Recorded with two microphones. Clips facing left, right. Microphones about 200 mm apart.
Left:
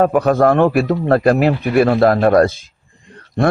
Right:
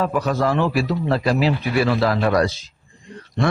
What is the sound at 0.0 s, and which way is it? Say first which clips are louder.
A man's voice: left 8 dB; 55° left (ahead or behind).